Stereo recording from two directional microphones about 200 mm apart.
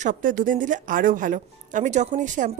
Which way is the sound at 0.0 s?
40° right (ahead or behind).